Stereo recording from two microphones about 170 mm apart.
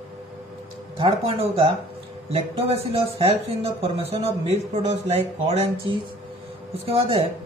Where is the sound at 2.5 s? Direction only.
35° right (ahead or behind).